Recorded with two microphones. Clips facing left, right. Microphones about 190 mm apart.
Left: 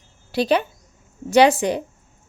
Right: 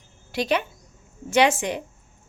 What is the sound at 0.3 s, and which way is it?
A woman's voice, 35° left (ahead or behind).